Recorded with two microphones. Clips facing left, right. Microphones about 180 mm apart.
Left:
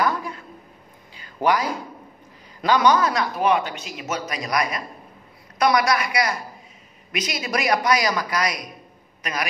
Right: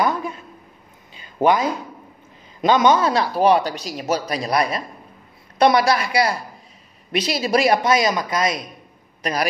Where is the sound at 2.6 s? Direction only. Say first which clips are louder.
Right 2 dB; 25° right (ahead or behind).